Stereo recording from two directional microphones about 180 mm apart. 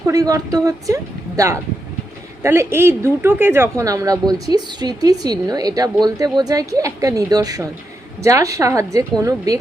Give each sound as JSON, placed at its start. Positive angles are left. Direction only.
{"t": 0.0, "sound": "a woman's voice", "side_deg": -20}